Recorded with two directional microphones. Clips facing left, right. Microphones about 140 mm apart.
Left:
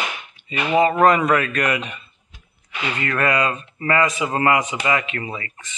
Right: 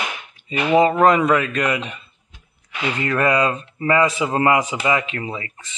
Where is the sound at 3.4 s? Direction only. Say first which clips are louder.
Right 2 dB; 35° right (ahead or behind).